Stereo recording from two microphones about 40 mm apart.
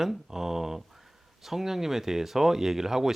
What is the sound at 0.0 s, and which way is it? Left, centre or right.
Speech, centre.